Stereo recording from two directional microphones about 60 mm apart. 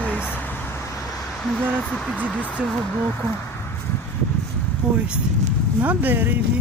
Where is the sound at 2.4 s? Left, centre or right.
Centre.